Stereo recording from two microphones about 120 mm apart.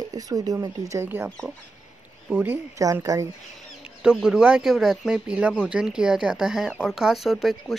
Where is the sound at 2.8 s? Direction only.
25° right (ahead or behind).